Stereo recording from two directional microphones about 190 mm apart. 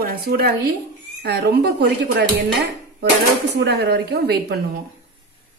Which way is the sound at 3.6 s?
60° right (ahead or behind).